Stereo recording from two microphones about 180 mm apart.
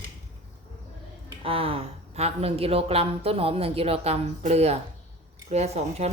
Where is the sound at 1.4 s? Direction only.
30° right (ahead or behind).